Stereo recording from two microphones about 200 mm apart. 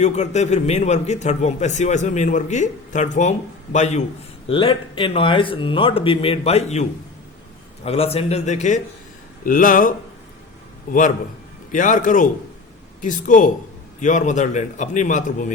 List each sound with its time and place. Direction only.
0.0 s a man's voice: 35° left (ahead or behind)
7.9 s a man's voice: 30° left (ahead or behind)
11.7 s a man's voice: 40° left (ahead or behind)